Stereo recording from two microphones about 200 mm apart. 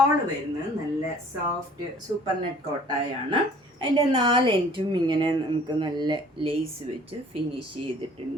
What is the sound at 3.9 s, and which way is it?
A woman's voice, 25° right (ahead or behind).